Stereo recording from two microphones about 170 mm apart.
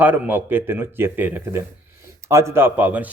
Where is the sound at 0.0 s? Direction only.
10° right (ahead or behind).